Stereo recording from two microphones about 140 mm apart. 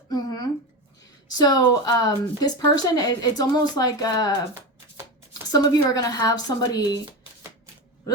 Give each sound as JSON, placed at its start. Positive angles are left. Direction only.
{"t": 0.1, "sound": "a sound", "side_deg": 30}
{"t": 1.4, "sound": "speech", "side_deg": 30}
{"t": 5.3, "sound": "speech", "side_deg": 25}